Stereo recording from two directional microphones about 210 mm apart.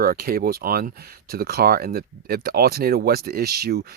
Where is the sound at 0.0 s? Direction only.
45° right (ahead or behind).